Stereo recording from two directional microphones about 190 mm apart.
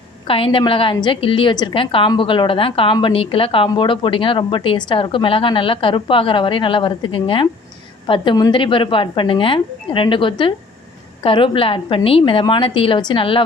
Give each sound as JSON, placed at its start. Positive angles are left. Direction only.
{"t": 0.3, "sound": "a woman's voice", "side_deg": 30}